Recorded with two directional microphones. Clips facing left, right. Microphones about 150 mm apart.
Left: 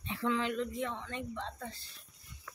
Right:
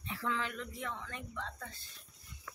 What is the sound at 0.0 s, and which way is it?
Speech, 20° left (ahead or behind).